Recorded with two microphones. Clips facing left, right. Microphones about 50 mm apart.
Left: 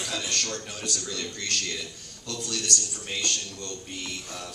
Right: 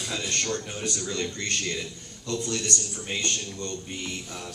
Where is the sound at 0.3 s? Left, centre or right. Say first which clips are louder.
Right 2 dB; right.